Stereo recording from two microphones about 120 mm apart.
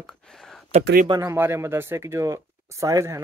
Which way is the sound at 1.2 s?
20° right (ahead or behind).